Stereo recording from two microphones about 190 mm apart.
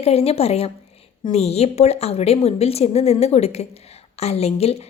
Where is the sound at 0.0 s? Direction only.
35° left (ahead or behind).